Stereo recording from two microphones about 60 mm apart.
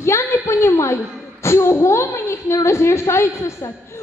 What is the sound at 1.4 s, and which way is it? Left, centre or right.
A woman's voice, left.